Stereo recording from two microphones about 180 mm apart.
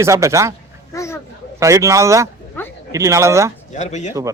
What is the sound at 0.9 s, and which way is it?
Speech, 15° left (ahead or behind).